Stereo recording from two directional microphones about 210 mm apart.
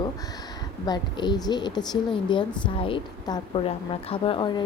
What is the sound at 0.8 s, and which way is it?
A woman's voice, 20° left (ahead or behind).